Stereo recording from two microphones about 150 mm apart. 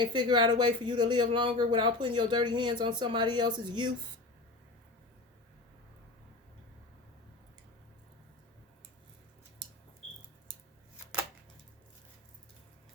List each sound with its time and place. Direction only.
0.0 s speech: 30° right (ahead or behind)